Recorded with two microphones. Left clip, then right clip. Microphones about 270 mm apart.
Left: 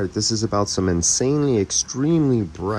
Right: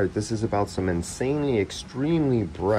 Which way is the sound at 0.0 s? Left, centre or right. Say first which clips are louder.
Left 3 dB; centre.